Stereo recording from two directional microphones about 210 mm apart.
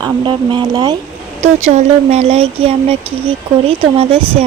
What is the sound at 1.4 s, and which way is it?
Speech, 30° right (ahead or behind).